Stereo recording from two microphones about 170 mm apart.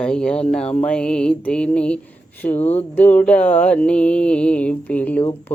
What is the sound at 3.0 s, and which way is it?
Mantra, 10° left (ahead or behind).